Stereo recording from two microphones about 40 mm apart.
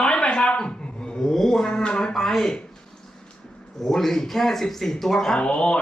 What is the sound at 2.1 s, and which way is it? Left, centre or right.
Speech, centre.